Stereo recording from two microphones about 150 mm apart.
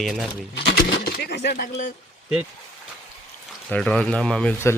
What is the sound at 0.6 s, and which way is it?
Speech, 90° left.